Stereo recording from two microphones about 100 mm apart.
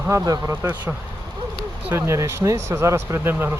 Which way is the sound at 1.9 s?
25° right (ahead or behind).